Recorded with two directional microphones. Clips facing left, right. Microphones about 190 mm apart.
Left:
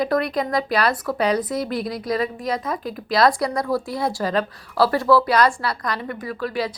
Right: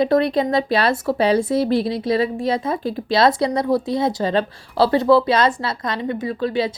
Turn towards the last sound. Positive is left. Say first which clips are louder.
# right 4 dB
turn(degrees=-25)  # may be behind; listen again after turning